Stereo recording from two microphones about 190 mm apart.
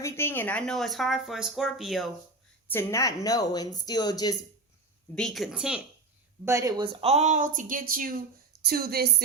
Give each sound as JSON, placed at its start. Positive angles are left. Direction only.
{"t": 0.0, "sound": "speech", "side_deg": 10}
{"t": 2.7, "sound": "speech", "side_deg": 15}
{"t": 5.1, "sound": "speech", "side_deg": 0}
{"t": 6.4, "sound": "a woman's voice", "side_deg": -15}